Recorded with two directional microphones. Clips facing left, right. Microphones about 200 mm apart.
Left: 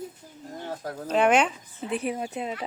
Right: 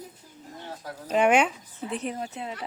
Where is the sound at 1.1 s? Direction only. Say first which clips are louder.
Even; 10° right (ahead or behind).